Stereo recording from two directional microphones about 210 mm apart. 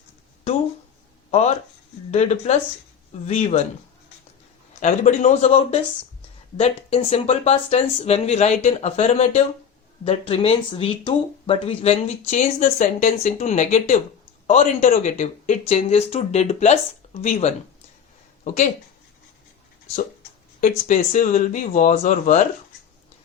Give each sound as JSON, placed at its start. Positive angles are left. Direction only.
{"t": 1.3, "sound": "speech", "side_deg": 30}
{"t": 4.8, "sound": "speech", "side_deg": 35}
{"t": 20.6, "sound": "speech", "side_deg": 40}